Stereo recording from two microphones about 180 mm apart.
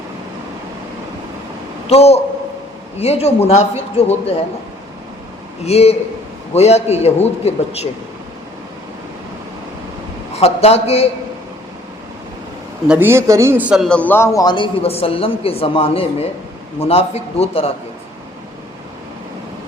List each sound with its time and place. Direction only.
1.9 s a man's voice: 35° left (ahead or behind)
5.6 s a man's voice: 35° left (ahead or behind)
10.3 s a man's voice: 35° left (ahead or behind)
12.9 s a man's voice: 10° right (ahead or behind); by 17.7 s 35° left (ahead or behind)